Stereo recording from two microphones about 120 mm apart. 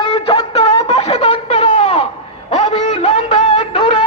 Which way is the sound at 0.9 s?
60° left (ahead or behind).